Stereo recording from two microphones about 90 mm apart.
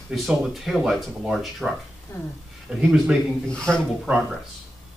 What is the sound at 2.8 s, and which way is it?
Speech, 5° right (ahead or behind).